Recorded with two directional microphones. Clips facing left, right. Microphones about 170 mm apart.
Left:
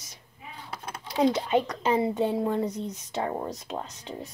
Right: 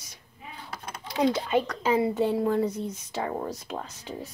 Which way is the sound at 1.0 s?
25° left (ahead or behind).